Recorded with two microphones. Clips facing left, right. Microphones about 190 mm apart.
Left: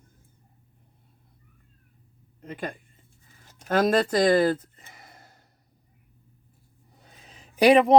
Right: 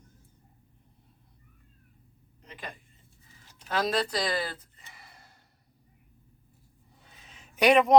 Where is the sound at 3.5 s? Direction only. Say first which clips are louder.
Left 7 dB; 50° left (ahead or behind).